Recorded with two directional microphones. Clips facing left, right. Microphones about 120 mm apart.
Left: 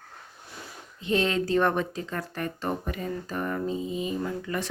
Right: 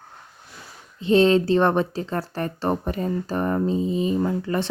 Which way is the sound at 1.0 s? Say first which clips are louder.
Right 9 dB; 30° right (ahead or behind).